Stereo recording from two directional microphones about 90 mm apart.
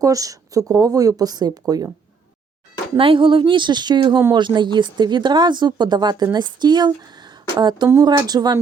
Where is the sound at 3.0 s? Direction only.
75° right (ahead or behind); by 8.5 s 50° right (ahead or behind).